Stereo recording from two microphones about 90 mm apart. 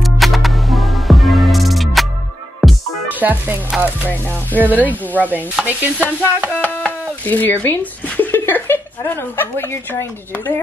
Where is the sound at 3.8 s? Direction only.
20° right (ahead or behind).